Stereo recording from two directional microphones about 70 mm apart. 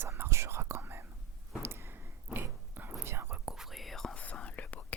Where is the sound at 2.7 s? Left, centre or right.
Right.